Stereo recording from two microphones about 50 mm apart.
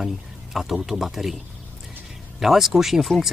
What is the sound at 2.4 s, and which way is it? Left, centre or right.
Speech, centre.